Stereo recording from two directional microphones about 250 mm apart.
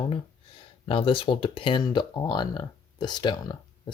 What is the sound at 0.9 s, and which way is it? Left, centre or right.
Speech, left.